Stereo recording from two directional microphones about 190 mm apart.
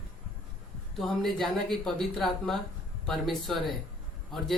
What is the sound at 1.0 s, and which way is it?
A man's voice, centre (ahead or behind).